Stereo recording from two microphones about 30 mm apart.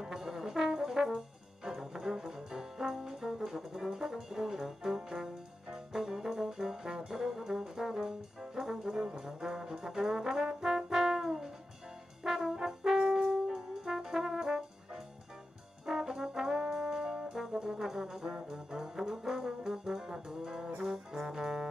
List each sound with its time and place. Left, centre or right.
0.0 s brass instrument: centre
15.8 s brass instrument: centre
17.7 s brass instrument: centre
21.1 s music: centre